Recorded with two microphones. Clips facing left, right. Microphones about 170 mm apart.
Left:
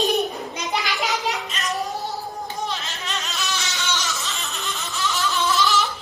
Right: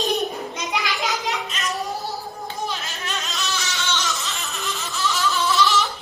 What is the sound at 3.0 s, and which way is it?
Music, centre (ahead or behind).